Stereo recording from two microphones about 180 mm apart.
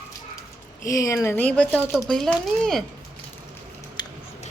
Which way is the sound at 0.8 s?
20° left (ahead or behind).